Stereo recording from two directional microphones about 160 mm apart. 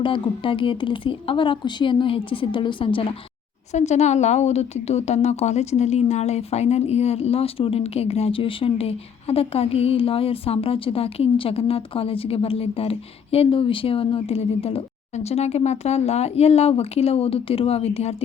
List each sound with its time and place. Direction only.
0.0 s a woman's voice: 30° left (ahead or behind)
3.7 s a woman's voice: 45° left (ahead or behind)